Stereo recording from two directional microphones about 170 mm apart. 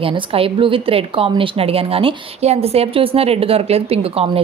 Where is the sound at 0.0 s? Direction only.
35° right (ahead or behind).